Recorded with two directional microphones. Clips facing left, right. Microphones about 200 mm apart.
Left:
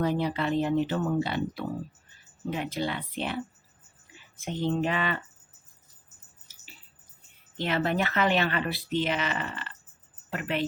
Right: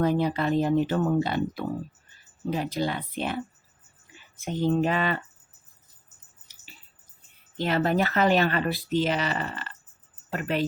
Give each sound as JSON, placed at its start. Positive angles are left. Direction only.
{"t": 0.0, "sound": "speech", "side_deg": -50}
{"t": 4.5, "sound": "speech", "side_deg": -40}
{"t": 7.6, "sound": "a woman's voice", "side_deg": -40}